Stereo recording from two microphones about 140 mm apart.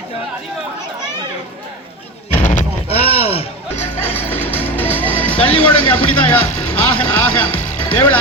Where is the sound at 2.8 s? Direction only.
45° left (ahead or behind).